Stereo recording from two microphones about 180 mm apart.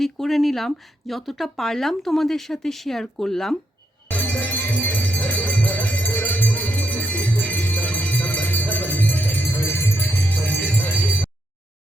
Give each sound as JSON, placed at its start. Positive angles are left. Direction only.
{"t": 0.0, "sound": "speech", "side_deg": 0}
{"t": 4.1, "sound": "music", "side_deg": 5}